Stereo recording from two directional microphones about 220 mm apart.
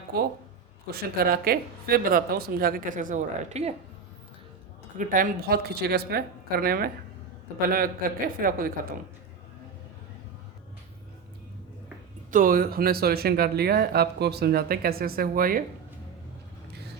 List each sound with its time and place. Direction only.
0.1 s speech: 45° right (ahead or behind); by 3.8 s 30° right (ahead or behind)
4.9 s speech: 40° right (ahead or behind)
12.3 s speech: 40° right (ahead or behind)